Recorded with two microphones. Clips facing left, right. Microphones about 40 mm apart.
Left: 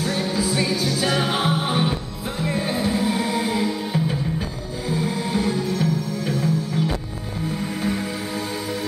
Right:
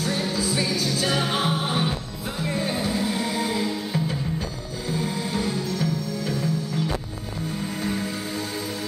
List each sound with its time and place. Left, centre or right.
0.0 s music: centre